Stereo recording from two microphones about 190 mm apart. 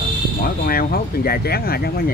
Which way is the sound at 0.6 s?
50° left (ahead or behind).